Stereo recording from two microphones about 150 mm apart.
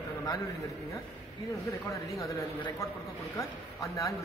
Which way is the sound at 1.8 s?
20° left (ahead or behind).